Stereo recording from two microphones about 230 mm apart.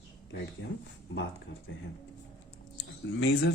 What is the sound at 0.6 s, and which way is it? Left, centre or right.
Speech, left.